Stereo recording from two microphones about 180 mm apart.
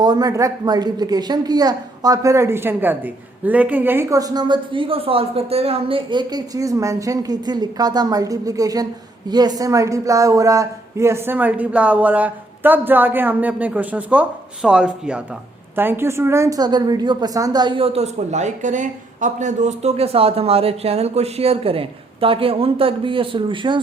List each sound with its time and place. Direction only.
0.0 s a woman's voice: 20° right (ahead or behind)